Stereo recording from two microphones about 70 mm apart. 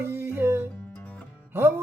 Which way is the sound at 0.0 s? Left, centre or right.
Right.